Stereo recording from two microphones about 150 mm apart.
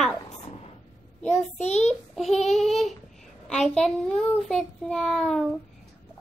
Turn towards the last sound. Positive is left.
turn(degrees=0)  # may be behind; listen again after turning